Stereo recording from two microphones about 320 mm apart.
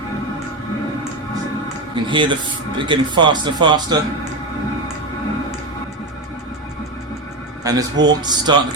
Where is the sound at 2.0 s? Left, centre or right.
Centre.